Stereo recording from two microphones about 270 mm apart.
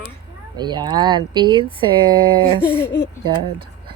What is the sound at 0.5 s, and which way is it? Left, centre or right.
Speech, centre.